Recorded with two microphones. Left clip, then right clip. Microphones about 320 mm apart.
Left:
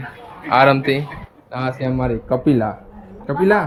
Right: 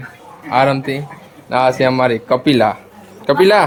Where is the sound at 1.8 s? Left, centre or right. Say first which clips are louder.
Right 8 dB; right.